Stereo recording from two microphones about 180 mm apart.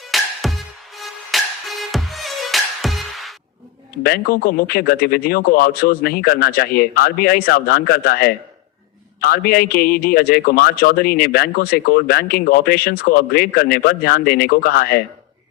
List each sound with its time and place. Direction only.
0.0 s music: centre (ahead or behind)
4.0 s a man's voice: 55° left (ahead or behind)